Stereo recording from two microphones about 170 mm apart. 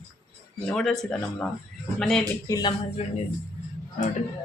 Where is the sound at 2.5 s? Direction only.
25° left (ahead or behind).